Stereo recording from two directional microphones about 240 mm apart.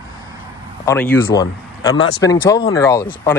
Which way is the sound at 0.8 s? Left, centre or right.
Centre.